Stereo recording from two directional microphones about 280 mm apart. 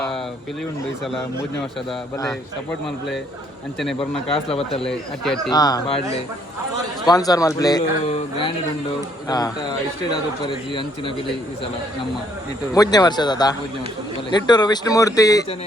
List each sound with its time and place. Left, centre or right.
4.3 s speech: centre
4.8 s speech: centre
5.5 s speech: centre
7.1 s speech: centre
12.7 s speech: centre